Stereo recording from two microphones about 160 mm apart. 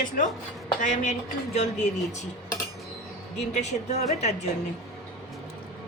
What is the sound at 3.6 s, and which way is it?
Speech, 45° left (ahead or behind).